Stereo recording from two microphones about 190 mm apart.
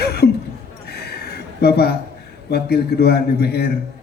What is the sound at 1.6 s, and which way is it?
Speech, 55° left (ahead or behind).